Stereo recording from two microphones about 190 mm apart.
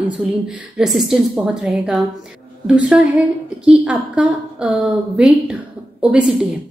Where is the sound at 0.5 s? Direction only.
5° right (ahead or behind).